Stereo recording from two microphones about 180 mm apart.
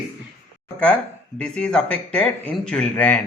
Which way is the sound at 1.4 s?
5° left (ahead or behind).